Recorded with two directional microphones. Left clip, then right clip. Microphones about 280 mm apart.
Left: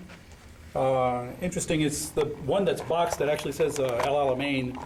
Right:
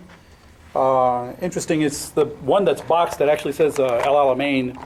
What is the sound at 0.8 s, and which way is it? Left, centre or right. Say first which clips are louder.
Speech: right 8 dB; centre.